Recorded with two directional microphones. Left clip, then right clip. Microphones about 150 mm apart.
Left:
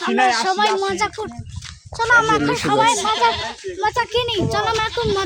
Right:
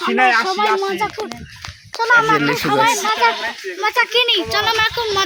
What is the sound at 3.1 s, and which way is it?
Speech, centre (ahead or behind).